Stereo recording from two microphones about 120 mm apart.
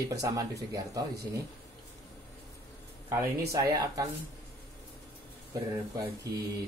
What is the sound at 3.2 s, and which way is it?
Speech, 25° right (ahead or behind).